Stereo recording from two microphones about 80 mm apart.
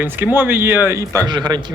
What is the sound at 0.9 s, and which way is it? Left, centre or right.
Speech, right.